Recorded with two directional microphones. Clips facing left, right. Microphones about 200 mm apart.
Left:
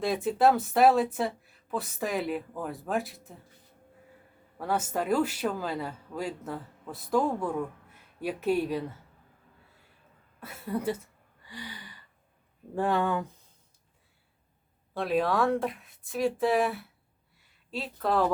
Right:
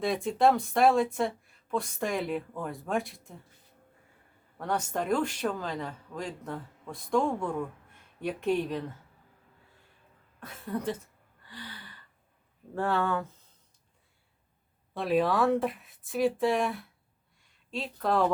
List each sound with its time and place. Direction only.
0.0 s speech: centre (ahead or behind)
4.5 s speech: 5° left (ahead or behind)
10.4 s speech: 10° left (ahead or behind)
11.4 s a sound: 15° left (ahead or behind)
12.7 s speech: 15° left (ahead or behind)
14.9 s speech: centre (ahead or behind)